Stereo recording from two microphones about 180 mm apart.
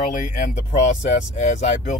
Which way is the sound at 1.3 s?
40° left (ahead or behind).